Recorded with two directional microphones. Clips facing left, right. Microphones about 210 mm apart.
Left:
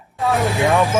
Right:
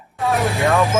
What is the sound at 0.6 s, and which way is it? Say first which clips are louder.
Speech: left 1 dB; 15° left (ahead or behind).